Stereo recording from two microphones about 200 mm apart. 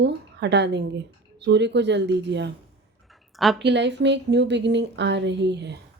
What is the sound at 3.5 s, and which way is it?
A woman's voice, 60° right (ahead or behind).